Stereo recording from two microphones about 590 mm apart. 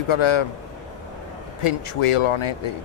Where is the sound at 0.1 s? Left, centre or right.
Left.